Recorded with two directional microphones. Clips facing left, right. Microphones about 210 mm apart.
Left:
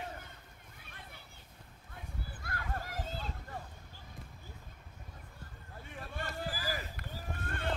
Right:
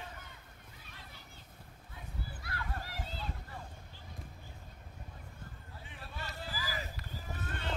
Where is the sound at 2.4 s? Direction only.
50° left (ahead or behind).